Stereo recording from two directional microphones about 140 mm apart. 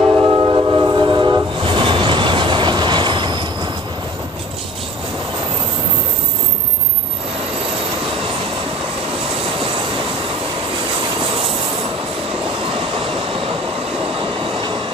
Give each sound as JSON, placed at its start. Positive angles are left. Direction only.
{"t": 0.2, "sound": "train", "side_deg": -30}